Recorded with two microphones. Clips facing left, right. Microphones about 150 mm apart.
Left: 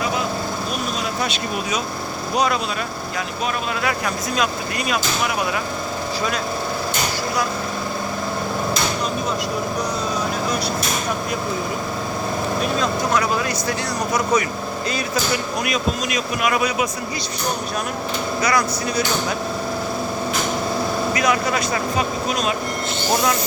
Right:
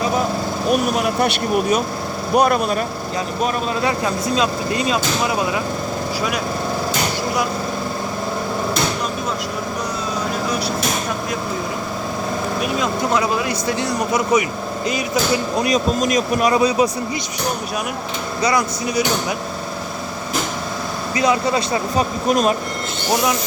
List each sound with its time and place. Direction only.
0.7 s speech: 65° right (ahead or behind)
3.8 s speech: 25° right (ahead or behind)
12.8 s speech: 20° right (ahead or behind)
15.5 s speech: 35° right (ahead or behind)
18.4 s speech: 20° right (ahead or behind)
21.2 s speech: 30° right (ahead or behind)
22.3 s speech: 50° right (ahead or behind)